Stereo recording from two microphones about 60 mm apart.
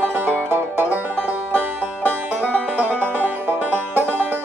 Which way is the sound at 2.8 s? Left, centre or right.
Right.